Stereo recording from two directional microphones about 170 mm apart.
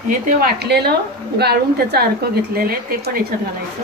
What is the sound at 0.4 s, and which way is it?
A woman's voice, 70° right (ahead or behind).